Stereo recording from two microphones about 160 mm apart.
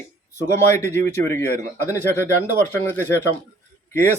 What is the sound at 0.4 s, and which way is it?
Speech, 15° left (ahead or behind).